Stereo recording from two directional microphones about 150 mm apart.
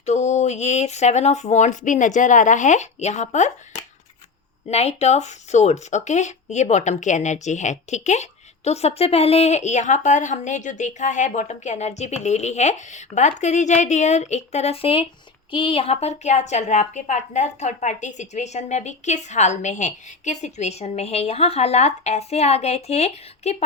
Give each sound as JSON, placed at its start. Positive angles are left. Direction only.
{"t": 0.0, "sound": "speech", "side_deg": 50}